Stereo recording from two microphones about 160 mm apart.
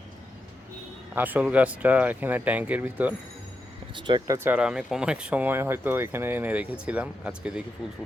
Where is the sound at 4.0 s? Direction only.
30° right (ahead or behind).